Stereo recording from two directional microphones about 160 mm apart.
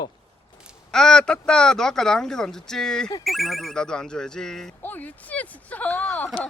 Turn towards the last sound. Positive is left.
turn(degrees=10)  # may be behind; listen again after turning